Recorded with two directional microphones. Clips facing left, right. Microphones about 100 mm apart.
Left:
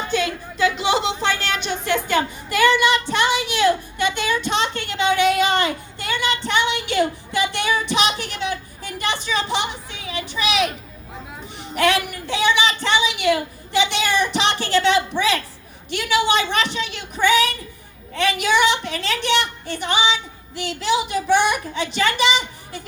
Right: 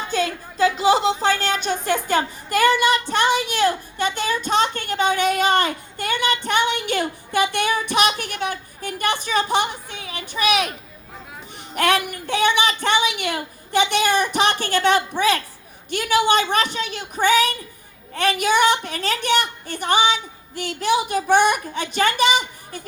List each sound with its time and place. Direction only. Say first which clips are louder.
0.1 s a woman's voice: right 1 dB; 35° right (ahead or behind)
11.7 s speech: even; 50° right (ahead or behind)